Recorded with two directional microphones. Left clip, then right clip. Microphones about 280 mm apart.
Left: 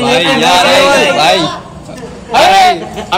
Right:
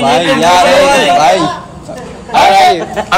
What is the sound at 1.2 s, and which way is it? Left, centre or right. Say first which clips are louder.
Speech: right 1 dB; left.